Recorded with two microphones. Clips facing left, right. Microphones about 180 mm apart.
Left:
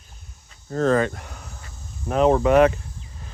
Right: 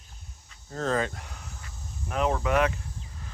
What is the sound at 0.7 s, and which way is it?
Speech, 65° left (ahead or behind).